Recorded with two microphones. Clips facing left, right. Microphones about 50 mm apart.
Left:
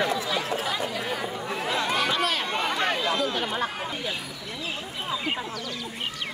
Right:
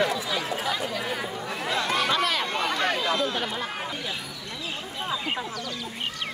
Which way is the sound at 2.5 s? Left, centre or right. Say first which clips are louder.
Even; centre.